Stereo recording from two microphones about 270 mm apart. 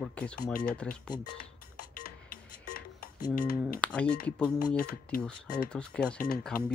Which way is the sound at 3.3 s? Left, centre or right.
Left.